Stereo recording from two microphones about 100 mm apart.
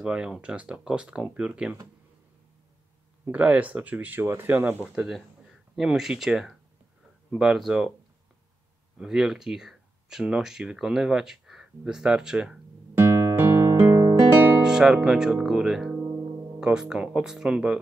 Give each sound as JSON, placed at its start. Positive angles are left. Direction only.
{"t": 0.0, "sound": "speech", "side_deg": -10}
{"t": 3.3, "sound": "speech", "side_deg": -15}
{"t": 4.9, "sound": "speech", "side_deg": -5}
{"t": 8.9, "sound": "speech", "side_deg": -5}
{"t": 12.9, "sound": "music", "side_deg": -25}
{"t": 14.6, "sound": "speech", "side_deg": -5}